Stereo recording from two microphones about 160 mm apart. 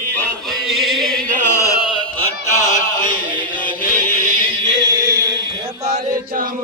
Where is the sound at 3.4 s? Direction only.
10° left (ahead or behind).